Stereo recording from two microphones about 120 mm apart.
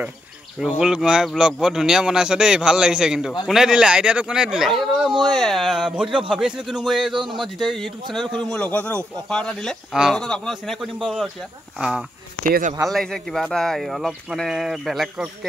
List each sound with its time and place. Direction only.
0.6 s speech: 5° right (ahead or behind)
7.2 s a sound: 40° right (ahead or behind)
7.6 s speech: centre (ahead or behind)
12.8 s speech: 5° left (ahead or behind)